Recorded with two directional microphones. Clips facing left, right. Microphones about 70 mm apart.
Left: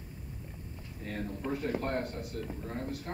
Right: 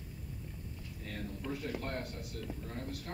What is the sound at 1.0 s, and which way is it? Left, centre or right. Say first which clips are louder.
A man's voice: left 6 dB; left.